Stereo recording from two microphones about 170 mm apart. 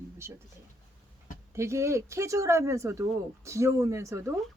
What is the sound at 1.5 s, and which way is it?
Speech, 15° right (ahead or behind).